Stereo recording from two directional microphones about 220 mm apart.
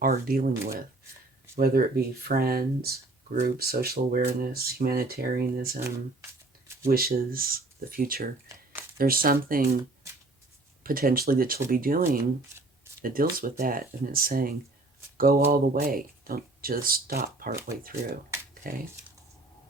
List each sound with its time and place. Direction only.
0.0 s speech: 40° right (ahead or behind)
1.5 s speech: 45° right (ahead or behind)
6.8 s speech: 40° right (ahead or behind)
10.8 s speech: 40° right (ahead or behind)
12.1 s speech: 10° right (ahead or behind)
13.0 s speech: 40° right (ahead or behind)
18.6 s speech: 40° right (ahead or behind)